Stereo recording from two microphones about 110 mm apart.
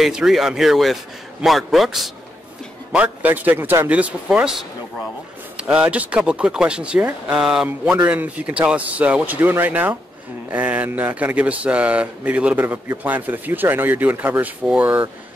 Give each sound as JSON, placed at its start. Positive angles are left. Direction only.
{"t": 0.0, "sound": "speech", "side_deg": -5}
{"t": 2.9, "sound": "speech", "side_deg": -10}